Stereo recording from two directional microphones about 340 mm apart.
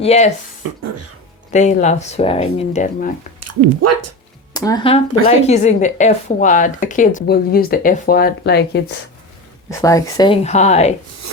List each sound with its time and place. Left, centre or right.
0.0 s speech: centre
1.5 s speech: centre
3.4 s speech: right
4.5 s speech: centre
5.2 s speech: right
5.5 s speech: centre
9.6 s speech: centre